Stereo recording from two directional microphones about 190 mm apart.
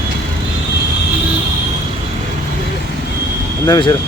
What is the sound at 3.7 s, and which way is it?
Speech, 25° left (ahead or behind).